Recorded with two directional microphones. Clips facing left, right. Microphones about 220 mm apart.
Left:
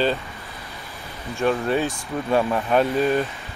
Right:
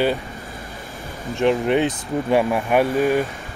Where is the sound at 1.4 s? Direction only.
20° right (ahead or behind).